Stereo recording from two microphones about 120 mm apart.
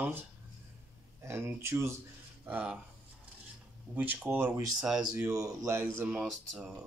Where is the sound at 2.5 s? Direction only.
10° right (ahead or behind).